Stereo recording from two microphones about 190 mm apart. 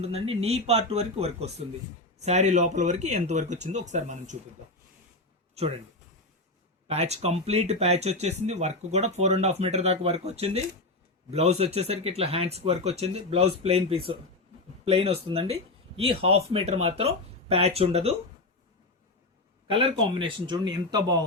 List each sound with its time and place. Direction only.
0.0 s speech: 35° right (ahead or behind)
6.8 s speech: 35° right (ahead or behind)
19.6 s speech: 25° right (ahead or behind)